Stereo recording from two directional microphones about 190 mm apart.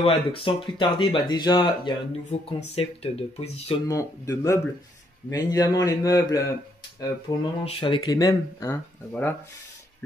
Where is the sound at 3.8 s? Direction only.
15° left (ahead or behind).